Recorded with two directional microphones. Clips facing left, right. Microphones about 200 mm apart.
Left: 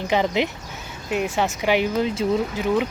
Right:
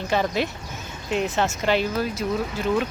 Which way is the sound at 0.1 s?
15° left (ahead or behind).